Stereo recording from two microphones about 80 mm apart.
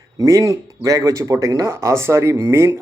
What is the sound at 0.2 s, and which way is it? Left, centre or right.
Speech, right.